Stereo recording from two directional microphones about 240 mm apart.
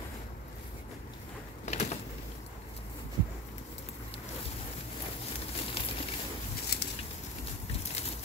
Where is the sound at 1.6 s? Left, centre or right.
Left.